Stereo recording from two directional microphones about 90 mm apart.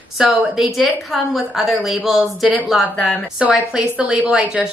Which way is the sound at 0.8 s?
Centre (ahead or behind).